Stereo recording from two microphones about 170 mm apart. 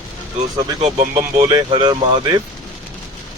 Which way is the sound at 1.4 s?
25° right (ahead or behind).